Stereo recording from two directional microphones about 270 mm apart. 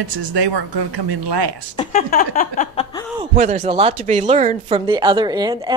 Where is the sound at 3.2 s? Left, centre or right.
Right.